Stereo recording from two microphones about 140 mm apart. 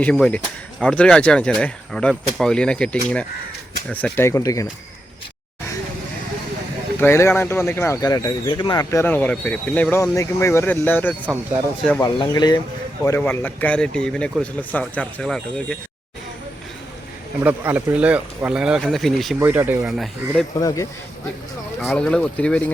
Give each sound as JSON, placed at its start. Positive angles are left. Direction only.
{"t": 0.0, "sound": "speech", "side_deg": 10}
{"t": 7.0, "sound": "speech", "side_deg": 20}
{"t": 12.0, "sound": "speech", "side_deg": 30}
{"t": 13.1, "sound": "speech", "side_deg": 15}
{"t": 17.4, "sound": "speech", "side_deg": -15}
{"t": 19.4, "sound": "speech", "side_deg": -15}
{"t": 20.6, "sound": "speech", "side_deg": 25}
{"t": 21.8, "sound": "speech", "side_deg": 5}